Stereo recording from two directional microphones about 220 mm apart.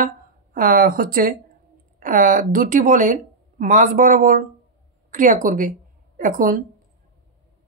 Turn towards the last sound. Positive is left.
turn(degrees=-35)  # may be behind; listen again after turning